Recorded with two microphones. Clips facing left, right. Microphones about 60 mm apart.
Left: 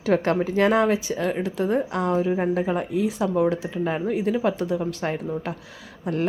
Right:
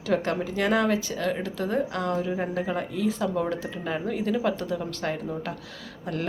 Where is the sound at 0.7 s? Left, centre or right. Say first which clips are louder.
Left 3 dB; left.